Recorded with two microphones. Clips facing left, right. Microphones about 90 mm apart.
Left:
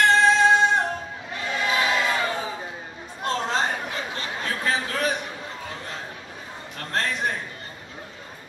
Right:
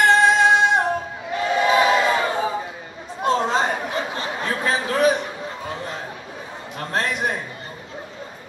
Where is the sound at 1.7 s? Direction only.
25° right (ahead or behind).